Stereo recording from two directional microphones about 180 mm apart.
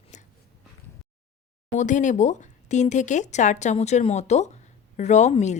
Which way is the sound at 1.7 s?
45° left (ahead or behind).